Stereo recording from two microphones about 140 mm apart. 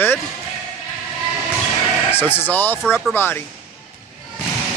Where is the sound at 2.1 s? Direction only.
15° left (ahead or behind).